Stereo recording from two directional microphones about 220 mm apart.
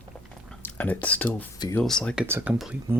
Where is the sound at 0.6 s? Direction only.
10° left (ahead or behind).